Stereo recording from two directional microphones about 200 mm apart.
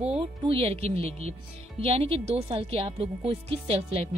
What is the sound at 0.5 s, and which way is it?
Speech, 30° right (ahead or behind).